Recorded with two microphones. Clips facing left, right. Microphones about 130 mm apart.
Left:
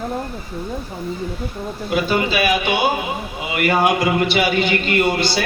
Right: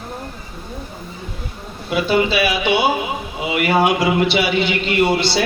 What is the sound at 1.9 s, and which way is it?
A man's voice, 45° left (ahead or behind).